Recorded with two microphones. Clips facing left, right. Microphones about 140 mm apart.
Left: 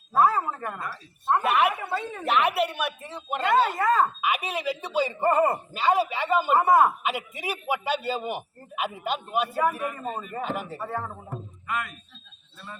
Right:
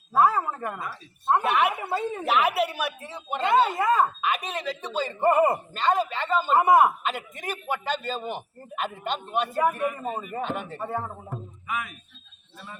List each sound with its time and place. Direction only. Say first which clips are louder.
0.1 s a sound: even; centre (ahead or behind)
0.6 s speech: right 1 dB; 5° right (ahead or behind)
3.8 s speech: even; 10° right (ahead or behind)
4.2 s a man's voice: left 1 dB; 5° left (ahead or behind)
5.2 s speech: right 3 dB; 15° right (ahead or behind)
5.7 s a man's voice: left 1 dB; 5° left (ahead or behind)
6.6 s speech: right 2 dB; 15° right (ahead or behind)
7.0 s a man's voice: left 1 dB; 10° left (ahead or behind)
9.9 s speech: right 1 dB; 5° right (ahead or behind)
10.4 s speech: left 2 dB; 5° left (ahead or behind)
10.8 s speech: right 1 dB; 20° right (ahead or behind)
11.3 s music: even; 5° right (ahead or behind)